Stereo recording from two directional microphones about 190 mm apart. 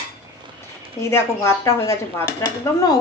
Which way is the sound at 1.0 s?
15° left (ahead or behind).